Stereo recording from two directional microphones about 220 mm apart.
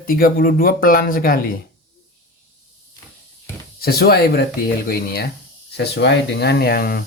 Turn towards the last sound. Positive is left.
turn(degrees=45)  # may be behind; listen again after turning